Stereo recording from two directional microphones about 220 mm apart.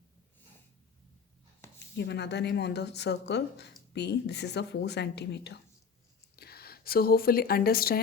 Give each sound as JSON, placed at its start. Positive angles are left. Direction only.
{"t": 2.0, "sound": "a woman's voice", "side_deg": 50}